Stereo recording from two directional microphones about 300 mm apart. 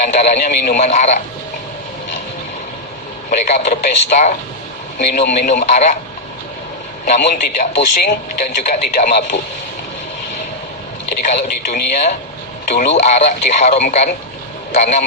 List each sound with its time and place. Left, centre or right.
0.0 s a man's voice: left
3.2 s a man's voice: left
7.0 s a man's voice: left
11.2 s a man's voice: left